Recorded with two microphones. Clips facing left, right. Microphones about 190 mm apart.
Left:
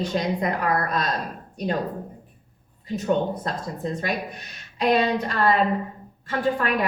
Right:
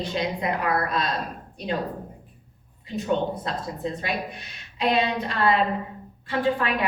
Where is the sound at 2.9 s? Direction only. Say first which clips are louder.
Left 2 dB; 45° left (ahead or behind).